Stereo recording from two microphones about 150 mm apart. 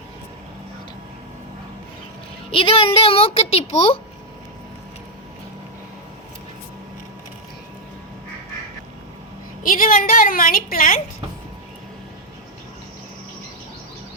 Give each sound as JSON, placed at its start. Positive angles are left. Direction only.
{"t": 2.5, "sound": "a child's voice", "side_deg": 40}
{"t": 9.6, "sound": "a woman's voice", "side_deg": 65}